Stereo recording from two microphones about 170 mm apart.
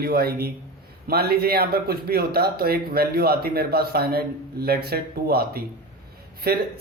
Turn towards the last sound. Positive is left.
turn(degrees=-65)  # may be behind; listen again after turning